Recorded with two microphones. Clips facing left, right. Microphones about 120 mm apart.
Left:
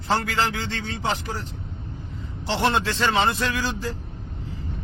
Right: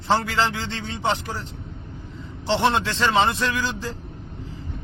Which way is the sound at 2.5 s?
25° right (ahead or behind).